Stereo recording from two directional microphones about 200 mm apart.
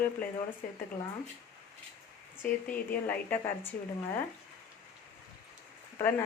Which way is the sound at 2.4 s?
10° left (ahead or behind).